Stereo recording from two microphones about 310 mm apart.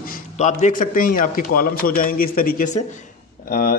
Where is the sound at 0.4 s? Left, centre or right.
Left.